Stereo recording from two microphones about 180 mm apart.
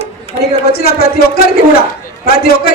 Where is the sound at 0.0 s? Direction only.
35° right (ahead or behind).